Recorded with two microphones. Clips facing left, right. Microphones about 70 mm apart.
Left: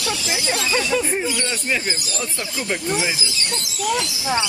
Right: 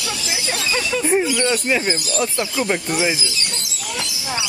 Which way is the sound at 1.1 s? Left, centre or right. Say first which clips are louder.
Right 6 dB; centre.